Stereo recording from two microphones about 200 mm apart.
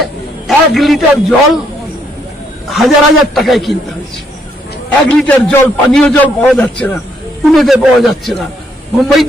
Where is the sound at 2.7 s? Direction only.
Centre (ahead or behind).